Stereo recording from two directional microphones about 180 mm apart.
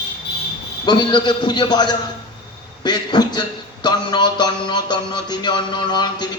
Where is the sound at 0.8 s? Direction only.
25° left (ahead or behind).